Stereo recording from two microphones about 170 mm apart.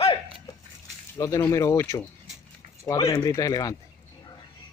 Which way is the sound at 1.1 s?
20° left (ahead or behind).